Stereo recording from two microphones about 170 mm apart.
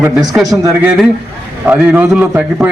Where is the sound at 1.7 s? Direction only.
10° right (ahead or behind).